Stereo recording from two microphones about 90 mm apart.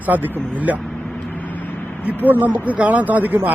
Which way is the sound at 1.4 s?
20° left (ahead or behind).